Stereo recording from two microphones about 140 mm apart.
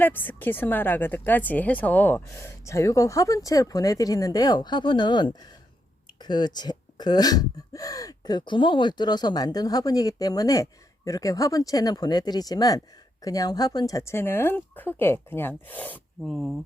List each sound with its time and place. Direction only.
0.0 s speech: 15° left (ahead or behind)
16.2 s speech: 5° right (ahead or behind)